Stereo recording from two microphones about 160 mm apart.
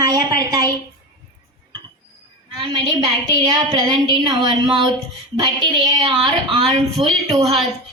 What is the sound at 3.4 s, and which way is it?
A woman's voice, 25° right (ahead or behind).